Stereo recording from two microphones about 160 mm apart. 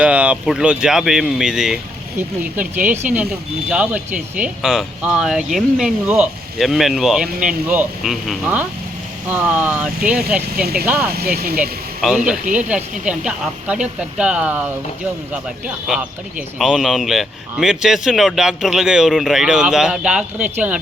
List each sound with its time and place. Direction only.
0.0 s speech: 5° right (ahead or behind)
11.1 s speech: 75° right (ahead or behind)
12.0 s speech: 5° right (ahead or behind)